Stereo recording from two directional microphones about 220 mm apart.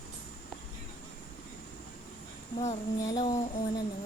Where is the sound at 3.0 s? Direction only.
15° left (ahead or behind).